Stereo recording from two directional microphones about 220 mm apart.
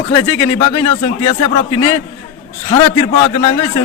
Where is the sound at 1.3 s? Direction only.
25° left (ahead or behind).